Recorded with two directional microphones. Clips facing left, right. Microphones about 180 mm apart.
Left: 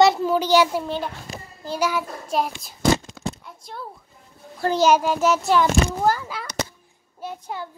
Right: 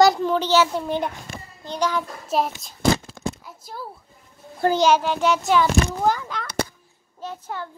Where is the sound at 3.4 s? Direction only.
5° right (ahead or behind).